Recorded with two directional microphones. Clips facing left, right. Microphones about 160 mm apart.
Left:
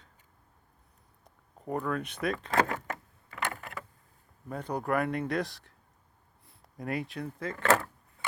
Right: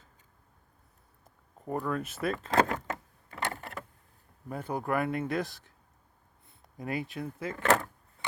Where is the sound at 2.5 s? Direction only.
25° right (ahead or behind).